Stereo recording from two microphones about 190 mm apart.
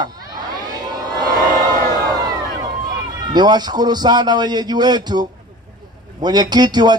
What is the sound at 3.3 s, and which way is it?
A man's voice, 20° right (ahead or behind).